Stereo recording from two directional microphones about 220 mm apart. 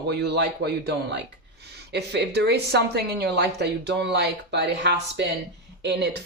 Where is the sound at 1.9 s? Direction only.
50° right (ahead or behind).